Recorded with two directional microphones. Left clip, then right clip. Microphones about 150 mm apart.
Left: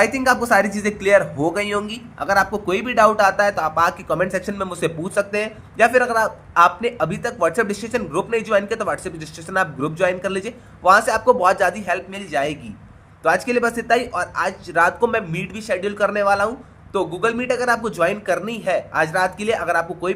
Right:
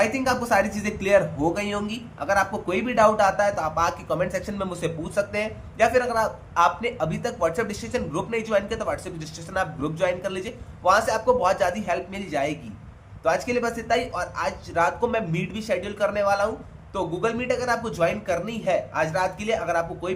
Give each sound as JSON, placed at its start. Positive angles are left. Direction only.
{"t": 0.0, "sound": "a man's voice", "side_deg": 60}